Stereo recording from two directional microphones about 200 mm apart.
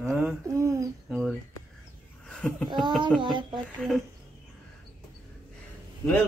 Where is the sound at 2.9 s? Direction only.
Centre (ahead or behind).